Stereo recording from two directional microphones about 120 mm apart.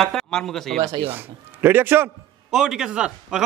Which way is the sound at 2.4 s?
5° right (ahead or behind).